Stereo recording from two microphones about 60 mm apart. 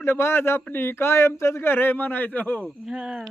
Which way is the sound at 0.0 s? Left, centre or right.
Left.